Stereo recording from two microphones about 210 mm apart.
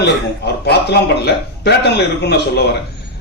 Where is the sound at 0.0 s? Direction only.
50° left (ahead or behind).